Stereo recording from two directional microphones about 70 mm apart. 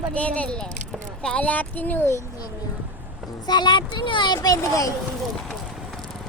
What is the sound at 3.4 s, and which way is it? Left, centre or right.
A child's voice, left.